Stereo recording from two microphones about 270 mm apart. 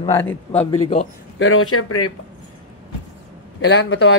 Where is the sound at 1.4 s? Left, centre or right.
Left.